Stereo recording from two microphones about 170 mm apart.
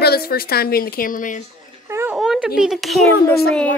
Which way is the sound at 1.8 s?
15° right (ahead or behind).